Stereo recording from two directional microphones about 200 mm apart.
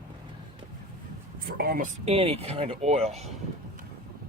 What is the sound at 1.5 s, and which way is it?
Speech, 50° right (ahead or behind).